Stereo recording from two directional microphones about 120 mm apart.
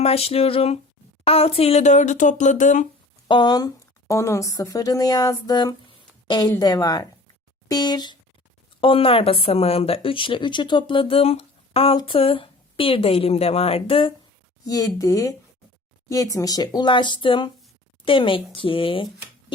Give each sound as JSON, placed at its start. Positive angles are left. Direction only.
{"t": 0.0, "sound": "speech", "side_deg": 55}
{"t": 1.8, "sound": "speech", "side_deg": 85}
{"t": 3.2, "sound": "speech", "side_deg": 40}
{"t": 4.1, "sound": "a woman's voice", "side_deg": 25}
{"t": 8.8, "sound": "speech", "side_deg": 50}
{"t": 14.6, "sound": "a woman's voice", "side_deg": 30}